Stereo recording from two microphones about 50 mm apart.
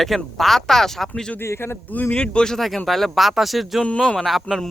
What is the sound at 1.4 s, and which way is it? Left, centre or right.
Speech, left.